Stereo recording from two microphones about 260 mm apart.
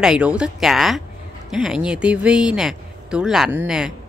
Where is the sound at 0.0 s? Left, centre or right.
Centre.